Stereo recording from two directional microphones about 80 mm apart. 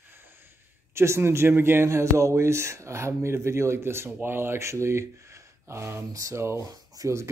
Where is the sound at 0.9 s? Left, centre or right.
Right.